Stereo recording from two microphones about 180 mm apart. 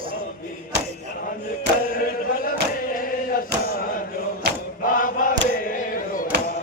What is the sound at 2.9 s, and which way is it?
Chant, 50° left (ahead or behind).